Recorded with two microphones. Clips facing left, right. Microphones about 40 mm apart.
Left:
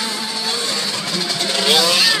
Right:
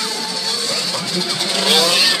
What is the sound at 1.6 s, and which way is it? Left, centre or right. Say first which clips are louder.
Vehicle: even; centre.